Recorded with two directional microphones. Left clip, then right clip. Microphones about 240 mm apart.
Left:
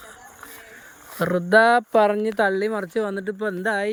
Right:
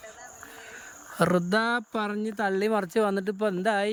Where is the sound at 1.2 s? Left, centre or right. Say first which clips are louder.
Left 1 dB; centre.